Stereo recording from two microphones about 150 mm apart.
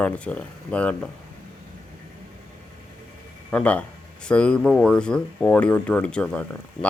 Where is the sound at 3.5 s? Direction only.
10° left (ahead or behind).